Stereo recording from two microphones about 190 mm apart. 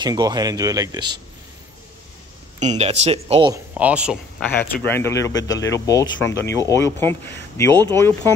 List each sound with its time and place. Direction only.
0.0 s speech: 20° right (ahead or behind)
2.6 s speech: 35° right (ahead or behind)
3.5 s speech: 10° right (ahead or behind)
4.4 s speech: 10° left (ahead or behind)